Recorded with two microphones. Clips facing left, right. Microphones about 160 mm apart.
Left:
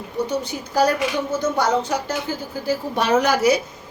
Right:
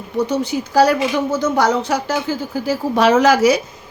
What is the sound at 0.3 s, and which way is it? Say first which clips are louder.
A woman's voice: right 5 dB; 90° right.